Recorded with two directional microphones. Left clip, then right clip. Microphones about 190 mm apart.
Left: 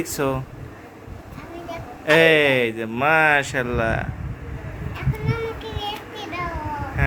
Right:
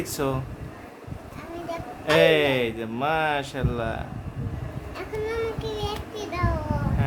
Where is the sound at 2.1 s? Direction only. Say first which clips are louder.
Left 4 dB; 15° left (ahead or behind).